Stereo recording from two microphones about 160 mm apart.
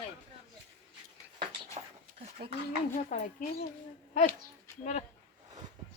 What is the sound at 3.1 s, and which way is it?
Speech, 55° left (ahead or behind).